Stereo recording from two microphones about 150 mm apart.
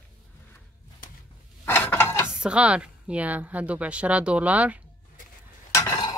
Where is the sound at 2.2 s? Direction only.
5° right (ahead or behind).